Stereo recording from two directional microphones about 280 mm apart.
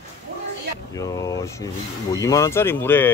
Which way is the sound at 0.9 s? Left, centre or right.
Centre.